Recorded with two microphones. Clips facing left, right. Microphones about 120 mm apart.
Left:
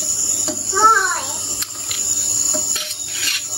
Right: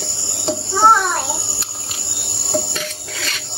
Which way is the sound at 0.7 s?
10° right (ahead or behind).